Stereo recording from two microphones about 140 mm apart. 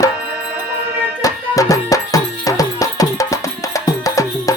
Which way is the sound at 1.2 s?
25° left (ahead or behind).